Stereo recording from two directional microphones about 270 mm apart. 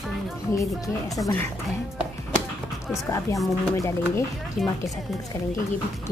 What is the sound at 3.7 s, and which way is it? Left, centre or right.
Speech, centre.